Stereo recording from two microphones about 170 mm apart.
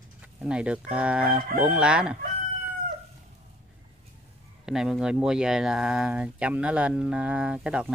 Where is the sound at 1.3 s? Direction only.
50° right (ahead or behind).